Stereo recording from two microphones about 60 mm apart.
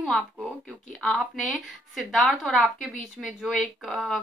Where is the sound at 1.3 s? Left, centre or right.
Centre.